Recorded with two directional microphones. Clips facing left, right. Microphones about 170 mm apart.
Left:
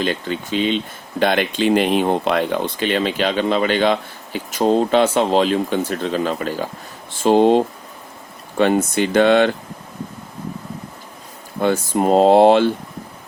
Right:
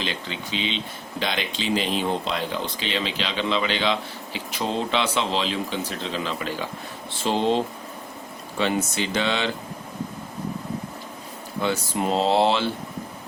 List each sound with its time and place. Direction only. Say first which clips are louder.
0.0 s speech: left 9 dB; 50° left (ahead or behind)
11.6 s speech: left 8 dB; 50° left (ahead or behind)